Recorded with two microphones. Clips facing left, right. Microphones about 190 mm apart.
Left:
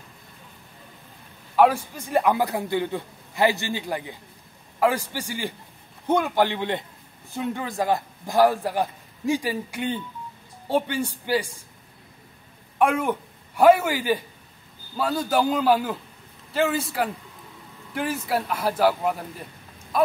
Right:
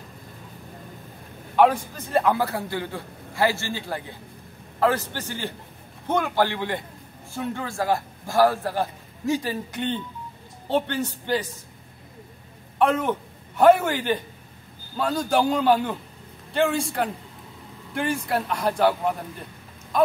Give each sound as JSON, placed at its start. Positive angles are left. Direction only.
{"t": 1.6, "sound": "a man's voice", "side_deg": 10}
{"t": 12.7, "sound": "a woman's voice", "side_deg": 10}